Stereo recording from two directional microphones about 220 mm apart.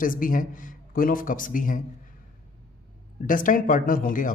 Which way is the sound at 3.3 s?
40° left (ahead or behind).